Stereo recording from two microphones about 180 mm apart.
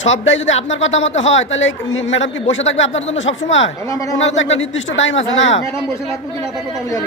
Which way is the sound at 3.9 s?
20° left (ahead or behind).